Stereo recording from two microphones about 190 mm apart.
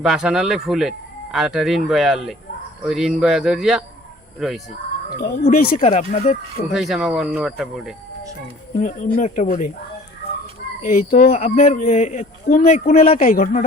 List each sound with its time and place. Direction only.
0.0 s speech: 5° right (ahead or behind)
5.1 s speech: 50° left (ahead or behind)
5.7 s a man's voice: 35° left (ahead or behind)
6.7 s speech: centre (ahead or behind)
8.8 s a man's voice: 40° left (ahead or behind)
10.8 s speech: 45° left (ahead or behind)
11.3 s a man's voice: 35° left (ahead or behind)